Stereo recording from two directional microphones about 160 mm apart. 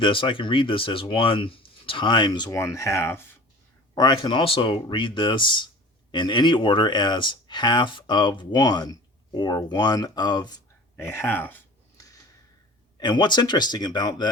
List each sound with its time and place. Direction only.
0.0 s speech: 30° left (ahead or behind)
10.9 s speech: 15° left (ahead or behind)
13.0 s speech: 30° left (ahead or behind)